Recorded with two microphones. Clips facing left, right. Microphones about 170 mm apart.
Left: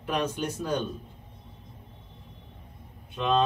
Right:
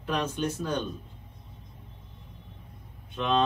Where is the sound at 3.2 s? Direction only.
5° left (ahead or behind).